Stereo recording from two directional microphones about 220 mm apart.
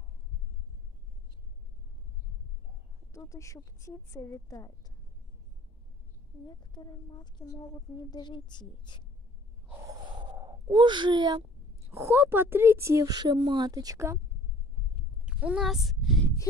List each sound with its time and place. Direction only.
3.1 s a woman's voice: 15° left (ahead or behind)
6.4 s a woman's voice: 20° left (ahead or behind)
9.7 s gasp: 15° right (ahead or behind)
11.9 s speech: 10° right (ahead or behind)
15.2 s a child's voice: 5° right (ahead or behind)